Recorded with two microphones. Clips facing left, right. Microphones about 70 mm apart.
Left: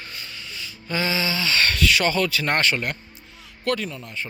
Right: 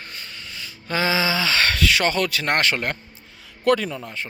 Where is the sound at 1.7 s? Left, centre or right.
Right.